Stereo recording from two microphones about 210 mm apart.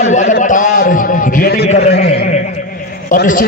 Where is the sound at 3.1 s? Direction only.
40° left (ahead or behind).